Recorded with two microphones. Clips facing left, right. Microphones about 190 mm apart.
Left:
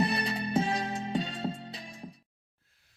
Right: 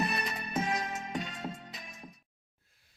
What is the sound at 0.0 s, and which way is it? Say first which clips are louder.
Music: left 5 dB; 30° left (ahead or behind).